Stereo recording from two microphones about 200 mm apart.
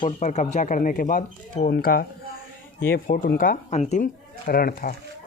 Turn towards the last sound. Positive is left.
turn(degrees=45)  # may be behind; listen again after turning